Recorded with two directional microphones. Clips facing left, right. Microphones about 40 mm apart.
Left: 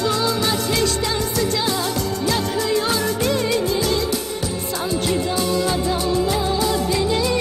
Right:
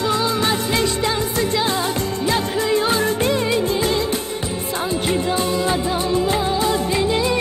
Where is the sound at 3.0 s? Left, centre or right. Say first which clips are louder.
Right 2 dB; right.